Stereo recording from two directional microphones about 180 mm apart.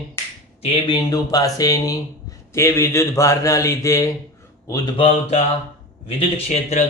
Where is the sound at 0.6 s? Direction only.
25° left (ahead or behind).